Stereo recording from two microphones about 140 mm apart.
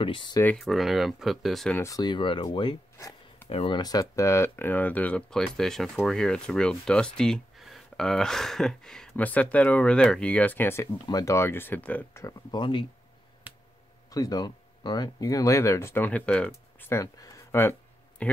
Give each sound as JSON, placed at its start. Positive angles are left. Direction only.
{"t": 0.0, "sound": "speech", "side_deg": 35}
{"t": 0.6, "sound": "speech", "side_deg": 0}
{"t": 1.8, "sound": "speech", "side_deg": 25}
{"t": 2.4, "sound": "a sound", "side_deg": 35}
{"t": 3.4, "sound": "speech", "side_deg": 40}
{"t": 13.5, "sound": "a sound", "side_deg": -10}
{"t": 14.1, "sound": "speech", "side_deg": 25}
{"t": 18.2, "sound": "speech", "side_deg": 10}